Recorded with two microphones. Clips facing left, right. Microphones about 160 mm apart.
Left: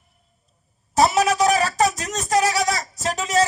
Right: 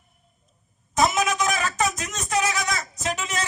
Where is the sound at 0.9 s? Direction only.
35° left (ahead or behind).